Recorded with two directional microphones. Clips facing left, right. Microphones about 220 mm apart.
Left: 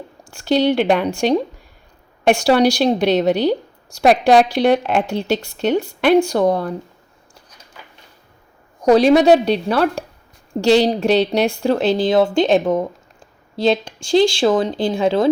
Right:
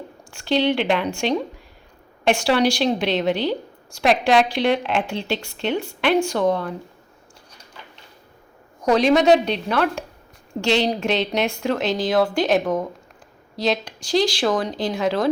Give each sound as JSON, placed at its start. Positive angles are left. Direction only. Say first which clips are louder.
{"t": 0.3, "sound": "a woman's voice", "louder": "left 4 dB", "side_deg": 40}
{"t": 8.8, "sound": "a woman's voice", "louder": "left 5 dB", "side_deg": 35}